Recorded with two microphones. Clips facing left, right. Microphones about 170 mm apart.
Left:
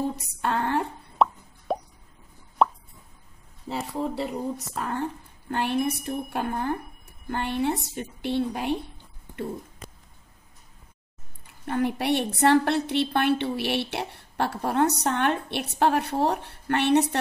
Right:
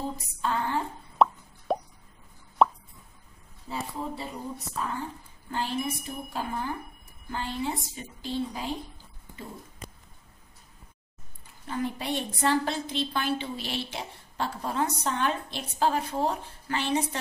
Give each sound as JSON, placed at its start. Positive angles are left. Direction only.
{"t": 0.1, "sound": "a woman's voice", "side_deg": 70}
{"t": 1.1, "sound": "plop", "side_deg": 0}
{"t": 3.9, "sound": "a woman's voice", "side_deg": 70}
{"t": 11.6, "sound": "a woman's voice", "side_deg": 65}